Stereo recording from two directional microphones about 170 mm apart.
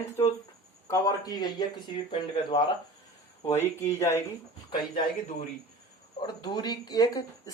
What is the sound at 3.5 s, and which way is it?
Speech, 15° left (ahead or behind).